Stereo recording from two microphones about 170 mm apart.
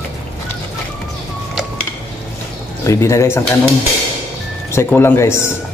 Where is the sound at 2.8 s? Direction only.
15° left (ahead or behind).